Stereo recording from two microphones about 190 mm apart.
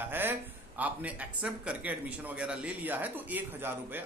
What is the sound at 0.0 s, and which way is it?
A woman's voice, 10° right (ahead or behind).